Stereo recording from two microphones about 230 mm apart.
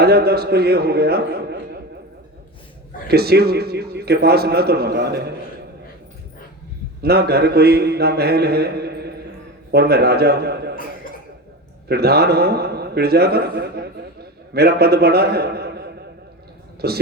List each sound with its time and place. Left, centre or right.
0.0 s a man's voice: right
3.1 s a man's voice: right
7.0 s a man's voice: right
11.9 s a man's voice: right